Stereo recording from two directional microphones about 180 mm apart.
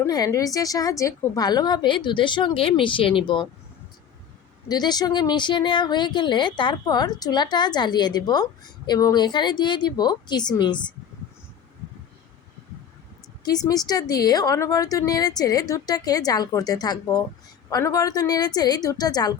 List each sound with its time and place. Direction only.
0.0 s speech: 20° left (ahead or behind)
4.7 s speech: 20° left (ahead or behind)
13.7 s speech: 20° left (ahead or behind)